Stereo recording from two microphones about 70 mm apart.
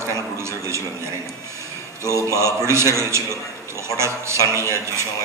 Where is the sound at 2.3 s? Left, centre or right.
Right.